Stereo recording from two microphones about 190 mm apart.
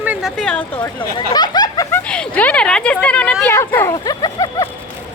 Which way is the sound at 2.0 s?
5° left (ahead or behind).